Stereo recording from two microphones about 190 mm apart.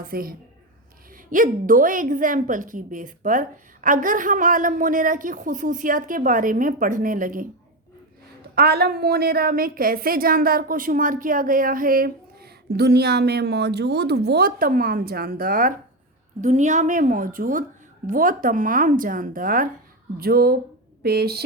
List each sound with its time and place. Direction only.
0.0 s a woman's voice: 50° right (ahead or behind)
8.5 s a woman's voice: 55° right (ahead or behind)